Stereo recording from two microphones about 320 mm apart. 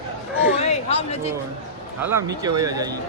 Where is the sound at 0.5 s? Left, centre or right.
Centre.